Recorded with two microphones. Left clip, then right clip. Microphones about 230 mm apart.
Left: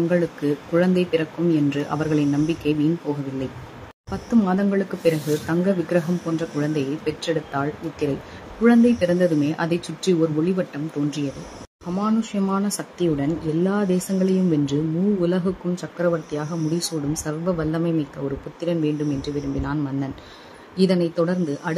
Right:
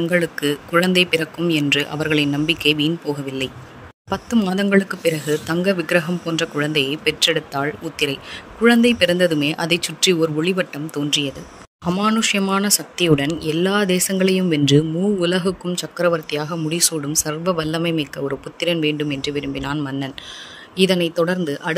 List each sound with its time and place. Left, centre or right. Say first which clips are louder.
0.1 s speech: right 3 dB; right
4.1 s speech: right 1 dB; right